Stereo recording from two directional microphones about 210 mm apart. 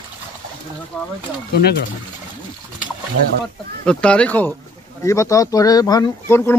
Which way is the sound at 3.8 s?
5° left (ahead or behind).